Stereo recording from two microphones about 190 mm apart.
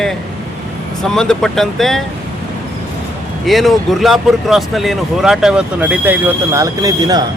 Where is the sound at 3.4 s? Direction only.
Centre (ahead or behind); by 7.2 s 20° right (ahead or behind).